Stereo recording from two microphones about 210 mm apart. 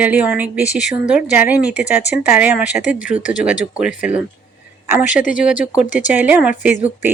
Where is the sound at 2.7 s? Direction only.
35° left (ahead or behind).